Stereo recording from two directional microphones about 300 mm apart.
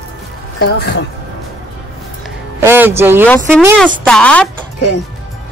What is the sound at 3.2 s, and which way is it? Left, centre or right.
Speech, centre.